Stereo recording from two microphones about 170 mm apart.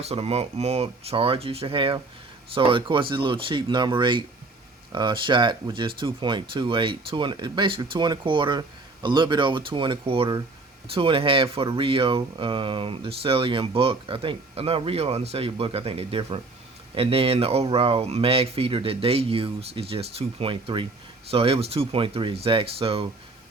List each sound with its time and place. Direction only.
0.0 s speech: 35° right (ahead or behind)